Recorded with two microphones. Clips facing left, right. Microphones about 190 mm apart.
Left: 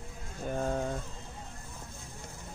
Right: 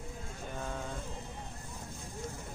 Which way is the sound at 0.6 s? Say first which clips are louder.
Left 9 dB; 40° left (ahead or behind).